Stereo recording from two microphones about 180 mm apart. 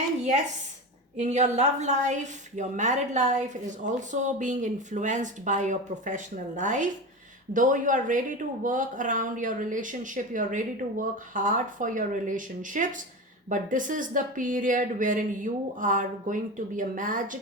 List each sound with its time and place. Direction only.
1.2 s a woman's voice: 40° right (ahead or behind)